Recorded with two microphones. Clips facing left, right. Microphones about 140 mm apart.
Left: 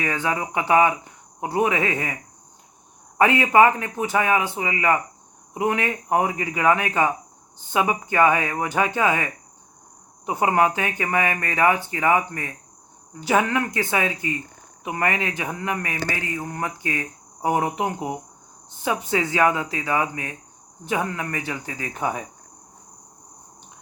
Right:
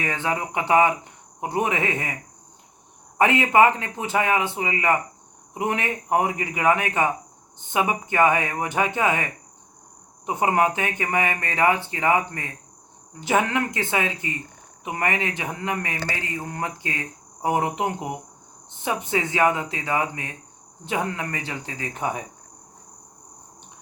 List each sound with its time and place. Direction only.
0.0 s speech: 25° right (ahead or behind)
3.2 s speech: 20° right (ahead or behind)
10.7 s speech: 25° right (ahead or behind)